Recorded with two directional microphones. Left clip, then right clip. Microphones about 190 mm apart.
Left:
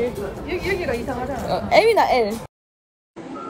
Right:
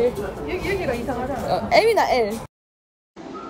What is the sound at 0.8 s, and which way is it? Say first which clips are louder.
Speech: even; 50° left (ahead or behind).